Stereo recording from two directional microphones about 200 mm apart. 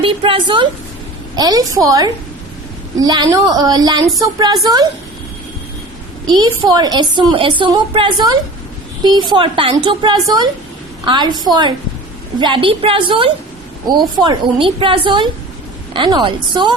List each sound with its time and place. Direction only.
0.0 s a woman's voice: 25° right (ahead or behind)
6.2 s a woman's voice: 20° right (ahead or behind)